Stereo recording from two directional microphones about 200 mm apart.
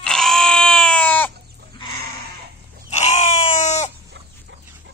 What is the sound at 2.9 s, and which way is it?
Screaming, 35° left (ahead or behind).